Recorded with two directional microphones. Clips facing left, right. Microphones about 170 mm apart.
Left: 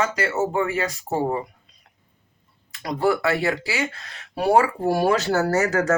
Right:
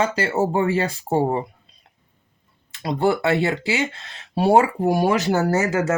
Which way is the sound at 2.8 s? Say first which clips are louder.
Right 1 dB; 25° right (ahead or behind).